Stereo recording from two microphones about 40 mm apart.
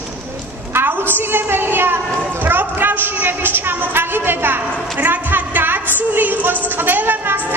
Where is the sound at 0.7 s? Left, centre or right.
Right.